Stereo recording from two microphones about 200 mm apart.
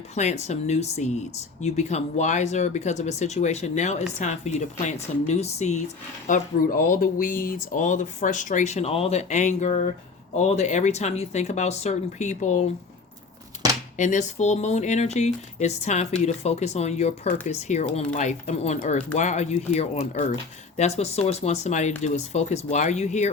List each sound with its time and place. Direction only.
0.1 s speech: 35° left (ahead or behind)
14.0 s speech: 35° left (ahead or behind)